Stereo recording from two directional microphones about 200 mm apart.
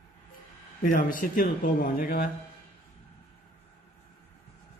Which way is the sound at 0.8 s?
40° left (ahead or behind).